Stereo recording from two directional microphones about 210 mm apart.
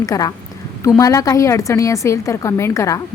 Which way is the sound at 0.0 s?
15° left (ahead or behind).